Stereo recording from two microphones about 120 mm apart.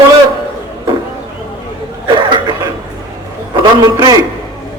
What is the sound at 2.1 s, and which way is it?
Chuckle, 45° right (ahead or behind).